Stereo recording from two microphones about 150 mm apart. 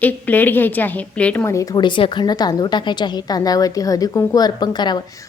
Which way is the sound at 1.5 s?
25° left (ahead or behind).